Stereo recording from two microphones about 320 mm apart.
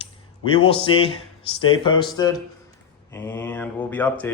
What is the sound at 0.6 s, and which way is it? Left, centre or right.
Speech, centre.